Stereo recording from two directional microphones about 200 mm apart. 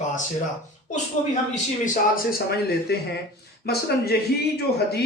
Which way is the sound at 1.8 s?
45° left (ahead or behind).